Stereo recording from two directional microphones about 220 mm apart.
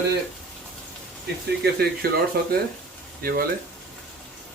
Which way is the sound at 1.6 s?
45° right (ahead or behind).